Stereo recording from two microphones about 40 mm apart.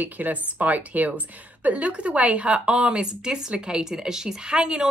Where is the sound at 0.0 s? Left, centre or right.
Right.